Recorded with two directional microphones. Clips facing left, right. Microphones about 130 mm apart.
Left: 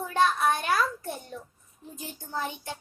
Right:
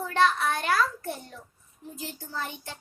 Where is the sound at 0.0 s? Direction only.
15° left (ahead or behind).